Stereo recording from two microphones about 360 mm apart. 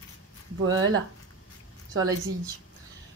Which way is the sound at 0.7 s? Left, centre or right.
Right.